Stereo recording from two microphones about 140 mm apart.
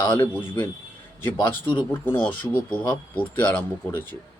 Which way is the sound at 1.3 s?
35° left (ahead or behind).